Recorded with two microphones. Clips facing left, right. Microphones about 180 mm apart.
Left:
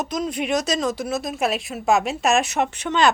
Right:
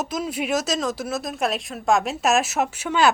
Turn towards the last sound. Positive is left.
turn(degrees=-5)  # may be behind; listen again after turning